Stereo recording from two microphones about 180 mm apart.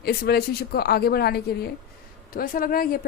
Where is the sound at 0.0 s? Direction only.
60° left (ahead or behind).